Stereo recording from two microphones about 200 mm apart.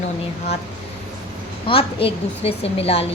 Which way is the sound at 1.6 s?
25° left (ahead or behind).